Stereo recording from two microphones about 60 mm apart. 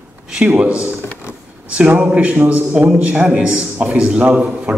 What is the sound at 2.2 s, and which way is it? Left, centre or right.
A man's voice, right.